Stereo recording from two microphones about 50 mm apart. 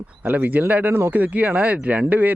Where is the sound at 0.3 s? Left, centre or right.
Right.